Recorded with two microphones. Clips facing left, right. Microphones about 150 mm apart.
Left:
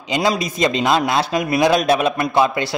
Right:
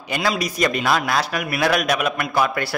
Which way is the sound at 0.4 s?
25° left (ahead or behind).